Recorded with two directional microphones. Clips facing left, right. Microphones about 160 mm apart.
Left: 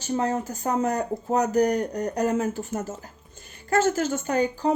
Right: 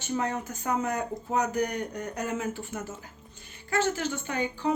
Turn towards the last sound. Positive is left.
turn(degrees=40)  # may be behind; listen again after turning